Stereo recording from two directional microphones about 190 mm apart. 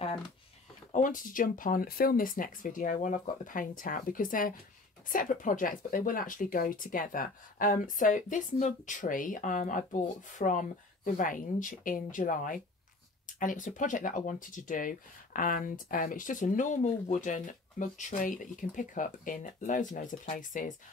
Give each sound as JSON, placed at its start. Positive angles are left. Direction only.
{"t": 0.9, "sound": "speech", "side_deg": 45}